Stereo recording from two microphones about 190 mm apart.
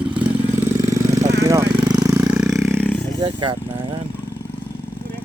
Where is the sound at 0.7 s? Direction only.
15° right (ahead or behind); by 3.0 s 5° left (ahead or behind).